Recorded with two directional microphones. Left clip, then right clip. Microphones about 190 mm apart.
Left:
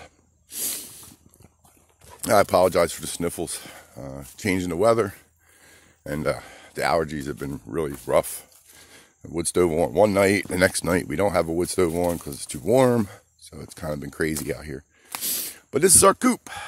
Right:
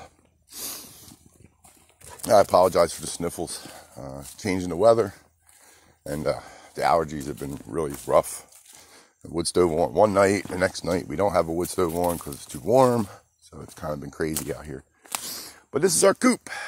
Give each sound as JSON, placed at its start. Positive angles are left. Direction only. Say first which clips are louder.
{"t": 0.0, "sound": "snort", "louder": "even", "side_deg": 30}
{"t": 2.2, "sound": "speech", "louder": "right 1 dB", "side_deg": 30}
{"t": 9.8, "sound": "speech", "louder": "even", "side_deg": 30}
{"t": 10.5, "sound": "speech", "louder": "left 4 dB", "side_deg": 40}
{"t": 15.2, "sound": "a sound", "louder": "left 5 dB", "side_deg": 40}
{"t": 16.2, "sound": "speech", "louder": "right 1 dB", "side_deg": 5}